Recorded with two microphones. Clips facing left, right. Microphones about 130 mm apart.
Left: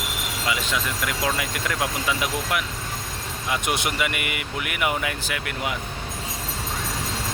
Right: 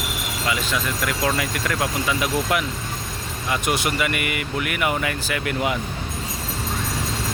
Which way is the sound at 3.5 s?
20° left (ahead or behind).